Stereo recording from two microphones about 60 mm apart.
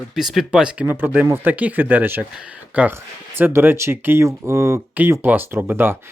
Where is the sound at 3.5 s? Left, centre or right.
Right.